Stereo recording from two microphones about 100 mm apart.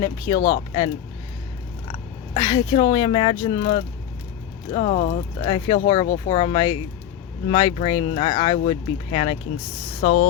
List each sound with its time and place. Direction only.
0.0 s speech: 40° left (ahead or behind)
2.3 s speech: 45° left (ahead or behind)
4.7 s speech: 90° left
5.5 s speech: 50° left (ahead or behind); by 9.4 s 90° left